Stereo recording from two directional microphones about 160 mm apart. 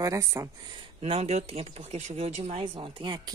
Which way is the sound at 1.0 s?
40° right (ahead or behind).